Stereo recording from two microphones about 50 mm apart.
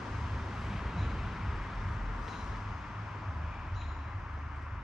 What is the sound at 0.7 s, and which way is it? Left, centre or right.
Vehicle, centre.